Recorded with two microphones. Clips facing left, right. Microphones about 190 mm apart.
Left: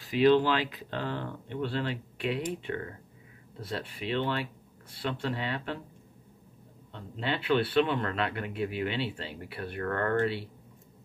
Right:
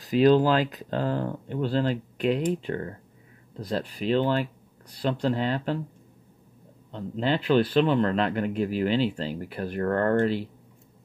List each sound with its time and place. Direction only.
0.0 s a man's voice: 40° right (ahead or behind)
6.9 s a man's voice: 40° right (ahead or behind)